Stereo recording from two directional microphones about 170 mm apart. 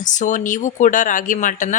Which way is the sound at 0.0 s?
45° left (ahead or behind).